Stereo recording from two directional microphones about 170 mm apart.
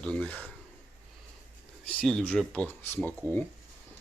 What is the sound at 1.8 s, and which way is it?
Speech, 5° left (ahead or behind).